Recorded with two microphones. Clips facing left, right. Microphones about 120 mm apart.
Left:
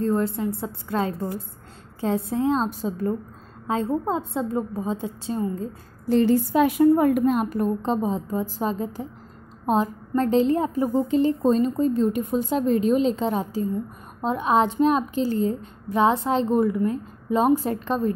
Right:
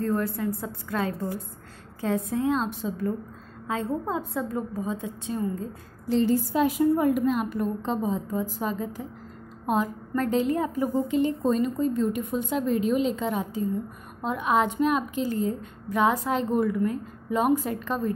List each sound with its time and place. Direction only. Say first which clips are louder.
0.0 s a woman's voice: left 3 dB; 25° left (ahead or behind)
6.2 s a woman's voice: left 3 dB; 70° left (ahead or behind); by 18.1 s 30° left (ahead or behind)